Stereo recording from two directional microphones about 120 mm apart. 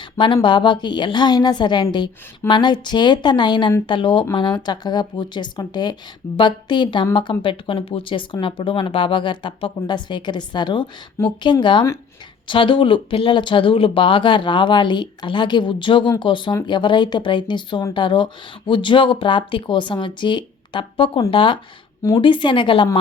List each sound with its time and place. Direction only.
0.4 s speech: 40° left (ahead or behind)